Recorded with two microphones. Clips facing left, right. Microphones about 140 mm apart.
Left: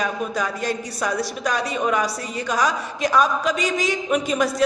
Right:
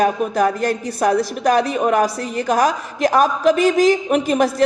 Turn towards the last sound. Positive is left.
turn(degrees=-55)  # may be behind; listen again after turning